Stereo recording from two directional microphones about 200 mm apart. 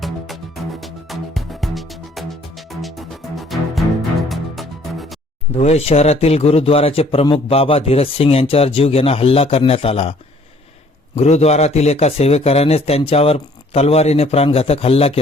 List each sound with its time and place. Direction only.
0.0 s music: centre (ahead or behind)
5.5 s a man's voice: 30° left (ahead or behind)
11.2 s a man's voice: 30° left (ahead or behind)